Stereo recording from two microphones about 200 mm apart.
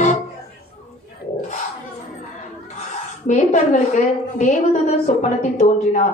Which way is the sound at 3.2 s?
35° left (ahead or behind).